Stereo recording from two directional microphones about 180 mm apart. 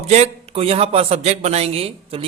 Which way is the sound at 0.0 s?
35° right (ahead or behind).